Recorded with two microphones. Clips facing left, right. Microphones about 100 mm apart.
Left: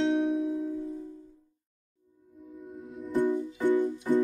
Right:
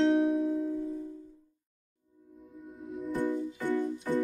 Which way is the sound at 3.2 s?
15° left (ahead or behind).